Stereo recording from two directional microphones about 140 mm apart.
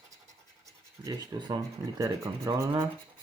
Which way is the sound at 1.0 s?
25° right (ahead or behind).